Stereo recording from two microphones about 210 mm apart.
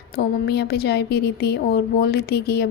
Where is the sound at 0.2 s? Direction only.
50° left (ahead or behind).